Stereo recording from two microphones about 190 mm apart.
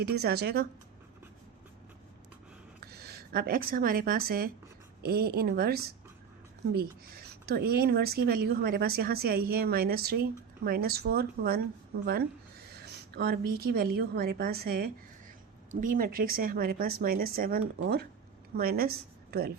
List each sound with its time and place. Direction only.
0.0 s speech: 55° right (ahead or behind)
2.8 s a woman's voice: 55° right (ahead or behind)